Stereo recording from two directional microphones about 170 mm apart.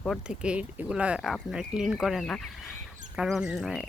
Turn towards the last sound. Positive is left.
turn(degrees=-5)  # may be behind; listen again after turning